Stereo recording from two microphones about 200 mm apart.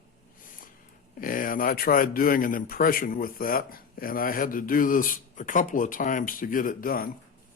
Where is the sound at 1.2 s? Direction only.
45° left (ahead or behind).